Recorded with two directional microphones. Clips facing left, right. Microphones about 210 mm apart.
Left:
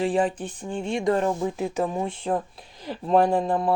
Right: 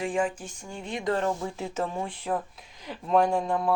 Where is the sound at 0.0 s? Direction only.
35° left (ahead or behind).